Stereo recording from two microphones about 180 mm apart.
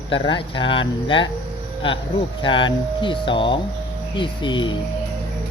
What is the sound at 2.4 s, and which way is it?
Speech, 25° left (ahead or behind).